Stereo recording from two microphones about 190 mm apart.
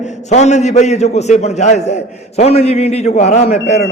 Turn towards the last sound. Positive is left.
turn(degrees=35)  # may be behind; listen again after turning